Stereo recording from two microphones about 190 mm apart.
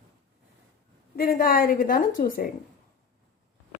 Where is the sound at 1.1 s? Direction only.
50° left (ahead or behind).